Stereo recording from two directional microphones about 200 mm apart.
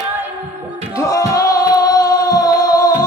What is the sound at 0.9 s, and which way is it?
Music, 15° left (ahead or behind).